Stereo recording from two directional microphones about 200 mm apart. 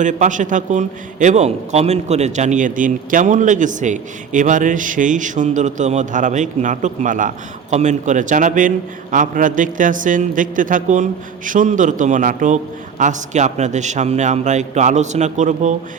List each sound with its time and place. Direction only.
0.0 s a man's voice: 40° right (ahead or behind)